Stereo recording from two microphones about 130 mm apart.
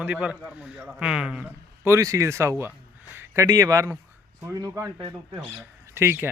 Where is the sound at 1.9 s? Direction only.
25° right (ahead or behind).